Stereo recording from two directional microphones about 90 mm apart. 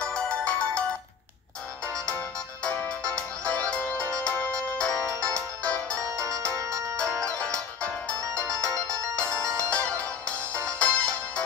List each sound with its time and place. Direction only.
0.0 s ringtone: 10° left (ahead or behind)
2.6 s music: 15° left (ahead or behind)
5.9 s music: 35° right (ahead or behind)
7.2 s music: 10° left (ahead or behind)
8.4 s ringtone: 10° left (ahead or behind)
9.6 s music: 10° left (ahead or behind)